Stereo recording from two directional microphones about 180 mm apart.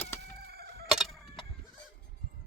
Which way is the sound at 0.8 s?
Centre (ahead or behind).